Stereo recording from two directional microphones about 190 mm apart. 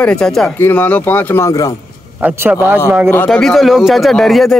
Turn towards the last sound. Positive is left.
turn(degrees=0)  # may be behind; listen again after turning